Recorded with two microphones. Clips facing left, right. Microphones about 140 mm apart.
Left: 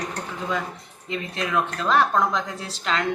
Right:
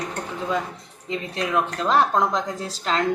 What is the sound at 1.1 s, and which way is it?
Speech, 25° right (ahead or behind).